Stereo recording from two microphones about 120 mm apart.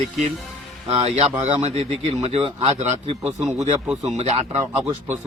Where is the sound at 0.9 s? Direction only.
60° right (ahead or behind).